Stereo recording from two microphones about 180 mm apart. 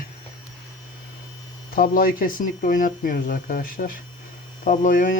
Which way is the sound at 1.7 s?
50° left (ahead or behind).